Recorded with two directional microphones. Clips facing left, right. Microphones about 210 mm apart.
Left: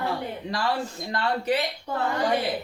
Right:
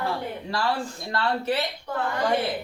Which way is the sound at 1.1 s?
15° left (ahead or behind).